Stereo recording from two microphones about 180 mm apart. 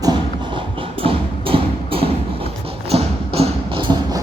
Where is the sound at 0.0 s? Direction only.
25° right (ahead or behind).